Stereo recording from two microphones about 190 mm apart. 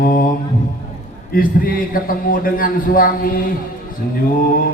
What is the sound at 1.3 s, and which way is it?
A man's voice, 50° left (ahead or behind).